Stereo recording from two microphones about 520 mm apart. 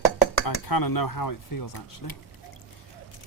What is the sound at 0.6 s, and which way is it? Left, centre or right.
Speech, left.